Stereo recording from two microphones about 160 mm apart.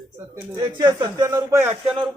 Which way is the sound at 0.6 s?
25° right (ahead or behind).